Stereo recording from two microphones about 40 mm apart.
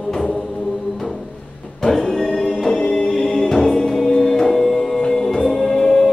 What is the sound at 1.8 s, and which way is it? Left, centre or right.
Music, centre.